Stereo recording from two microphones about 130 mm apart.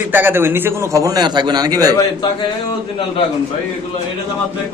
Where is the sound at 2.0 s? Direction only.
35° left (ahead or behind).